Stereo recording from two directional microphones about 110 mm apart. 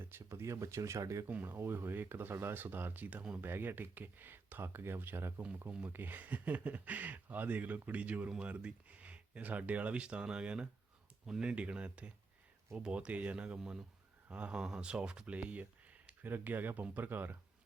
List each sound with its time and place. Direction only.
0.0 s speech: 20° right (ahead or behind)